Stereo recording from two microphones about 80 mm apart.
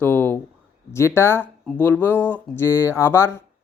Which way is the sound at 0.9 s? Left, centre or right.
Left.